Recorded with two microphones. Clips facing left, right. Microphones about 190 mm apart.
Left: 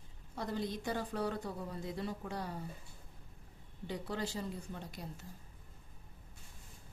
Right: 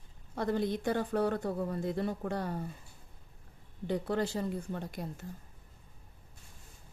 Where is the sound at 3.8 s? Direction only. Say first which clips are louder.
Right 8 dB; 55° right (ahead or behind).